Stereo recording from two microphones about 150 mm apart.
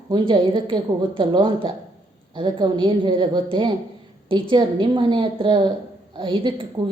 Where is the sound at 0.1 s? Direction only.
35° right (ahead or behind).